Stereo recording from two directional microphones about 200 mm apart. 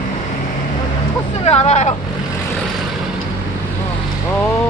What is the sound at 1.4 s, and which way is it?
Speech, 30° left (ahead or behind).